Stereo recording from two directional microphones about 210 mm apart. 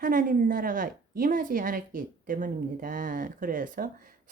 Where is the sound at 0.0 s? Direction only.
40° right (ahead or behind).